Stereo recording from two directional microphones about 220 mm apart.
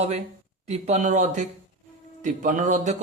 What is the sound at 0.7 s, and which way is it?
Speech, 30° right (ahead or behind).